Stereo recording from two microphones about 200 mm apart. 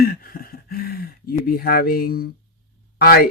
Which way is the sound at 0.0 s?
50° left (ahead or behind).